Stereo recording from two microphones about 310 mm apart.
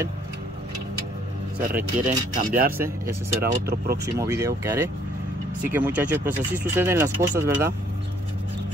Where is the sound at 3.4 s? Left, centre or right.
Right.